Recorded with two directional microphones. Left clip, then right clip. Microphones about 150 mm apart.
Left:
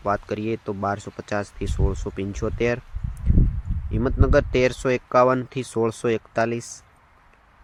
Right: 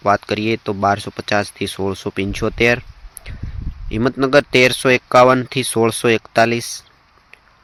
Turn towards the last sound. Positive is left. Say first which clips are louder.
# right 9 dB
turn(degrees=-35)  # may be behind; listen again after turning